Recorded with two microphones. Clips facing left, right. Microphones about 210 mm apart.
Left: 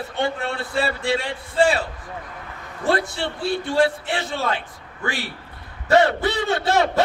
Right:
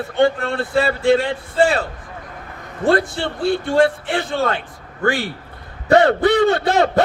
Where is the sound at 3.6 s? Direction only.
50° right (ahead or behind).